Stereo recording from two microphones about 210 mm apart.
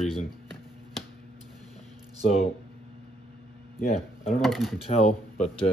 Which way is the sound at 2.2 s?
30° left (ahead or behind).